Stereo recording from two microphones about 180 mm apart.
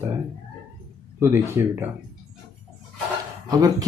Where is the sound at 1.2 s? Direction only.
15° right (ahead or behind).